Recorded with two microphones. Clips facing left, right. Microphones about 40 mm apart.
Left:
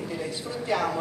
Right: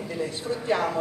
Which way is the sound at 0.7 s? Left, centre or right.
Right.